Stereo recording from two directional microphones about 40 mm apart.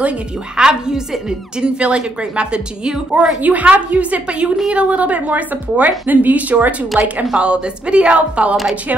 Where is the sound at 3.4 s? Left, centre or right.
Right.